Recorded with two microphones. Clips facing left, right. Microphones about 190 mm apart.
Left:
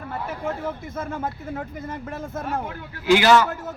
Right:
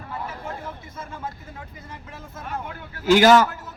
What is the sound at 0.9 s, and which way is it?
Speech, 55° left (ahead or behind).